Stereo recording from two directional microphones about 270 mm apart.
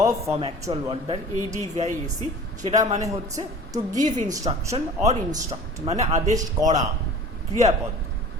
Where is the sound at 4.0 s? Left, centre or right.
Right.